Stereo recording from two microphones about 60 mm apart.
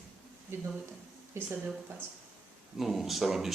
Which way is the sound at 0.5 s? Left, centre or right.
Right.